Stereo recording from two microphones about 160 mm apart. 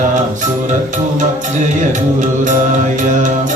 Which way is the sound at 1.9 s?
50° right (ahead or behind).